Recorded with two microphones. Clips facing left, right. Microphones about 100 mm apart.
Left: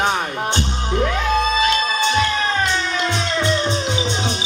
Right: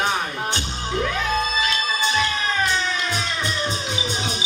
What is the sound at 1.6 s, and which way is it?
Music, 20° left (ahead or behind).